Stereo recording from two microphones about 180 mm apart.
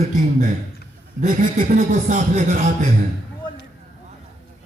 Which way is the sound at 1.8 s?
45° right (ahead or behind).